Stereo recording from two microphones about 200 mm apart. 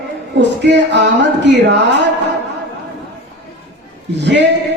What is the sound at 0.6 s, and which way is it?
Speech, 60° right (ahead or behind).